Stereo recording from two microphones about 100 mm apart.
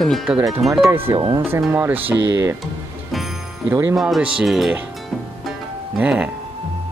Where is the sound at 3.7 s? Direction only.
25° right (ahead or behind).